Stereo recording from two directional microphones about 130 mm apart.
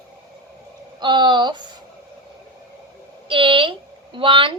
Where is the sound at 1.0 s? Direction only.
35° right (ahead or behind).